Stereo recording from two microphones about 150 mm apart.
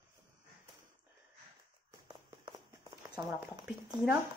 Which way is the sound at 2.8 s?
25° right (ahead or behind).